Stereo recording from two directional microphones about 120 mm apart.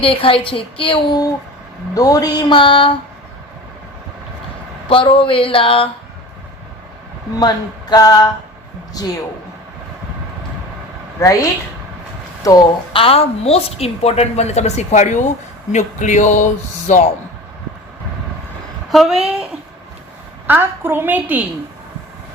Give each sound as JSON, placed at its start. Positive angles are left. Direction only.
{"t": 0.0, "sound": "a woman's voice", "side_deg": 50}
{"t": 2.0, "sound": "a sound", "side_deg": 30}
{"t": 4.9, "sound": "a woman's voice", "side_deg": 45}
{"t": 7.3, "sound": "a sound", "side_deg": 35}
{"t": 11.2, "sound": "speech", "side_deg": 25}
{"t": 12.4, "sound": "speech", "side_deg": 30}
{"t": 12.9, "sound": "a woman's voice", "side_deg": 50}
{"t": 18.9, "sound": "a woman's voice", "side_deg": 0}
{"t": 20.5, "sound": "a woman's voice", "side_deg": -15}